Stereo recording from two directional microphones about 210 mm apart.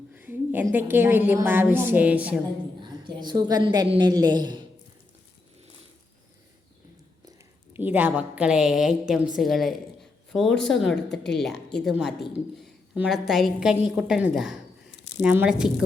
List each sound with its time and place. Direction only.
0.1 s a sound: 10° right (ahead or behind)
0.7 s a woman's voice: 10° right (ahead or behind)
2.8 s a woman's voice: 20° right (ahead or behind)
7.7 s a woman's voice: 10° right (ahead or behind)